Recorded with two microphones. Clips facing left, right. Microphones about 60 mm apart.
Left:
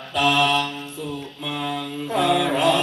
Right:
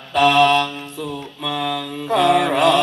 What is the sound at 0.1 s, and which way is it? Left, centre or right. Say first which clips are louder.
Mantra: right 6 dB; right.